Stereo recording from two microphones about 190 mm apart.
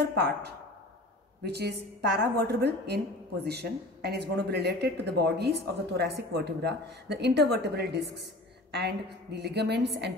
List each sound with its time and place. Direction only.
1.4 s speech: 60° right (ahead or behind)